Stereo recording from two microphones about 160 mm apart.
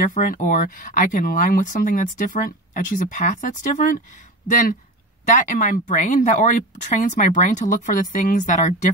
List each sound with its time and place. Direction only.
0.1 s speech: 55° left (ahead or behind)
5.2 s speech: 50° left (ahead or behind)